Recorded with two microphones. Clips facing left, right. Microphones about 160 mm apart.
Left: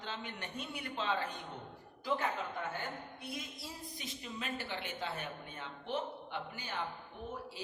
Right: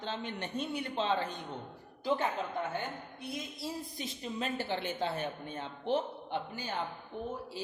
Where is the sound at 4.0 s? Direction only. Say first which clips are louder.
Right 6 dB; 30° right (ahead or behind).